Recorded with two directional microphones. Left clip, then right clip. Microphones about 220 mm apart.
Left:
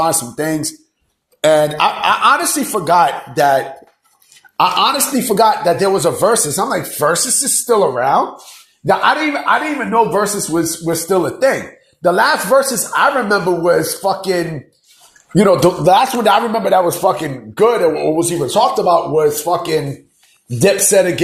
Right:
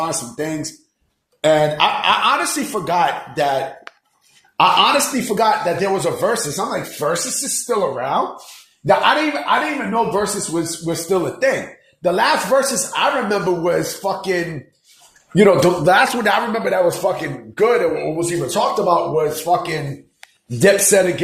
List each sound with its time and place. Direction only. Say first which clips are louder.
0.0 s speech: left 6 dB; 35° left (ahead or behind)
7.0 s a man's voice: left 6 dB; 25° left (ahead or behind)
8.9 s a man's voice: left 1 dB; 20° left (ahead or behind)
20.6 s a man's voice: left 1 dB; 10° left (ahead or behind)